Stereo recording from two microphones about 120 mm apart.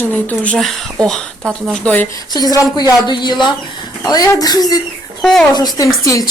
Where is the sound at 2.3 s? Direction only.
35° left (ahead or behind).